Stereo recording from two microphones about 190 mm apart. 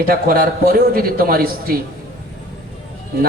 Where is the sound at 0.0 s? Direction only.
50° right (ahead or behind).